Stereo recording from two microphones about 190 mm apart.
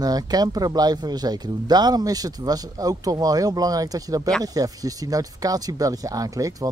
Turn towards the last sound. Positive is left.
turn(degrees=-20)  # may be behind; listen again after turning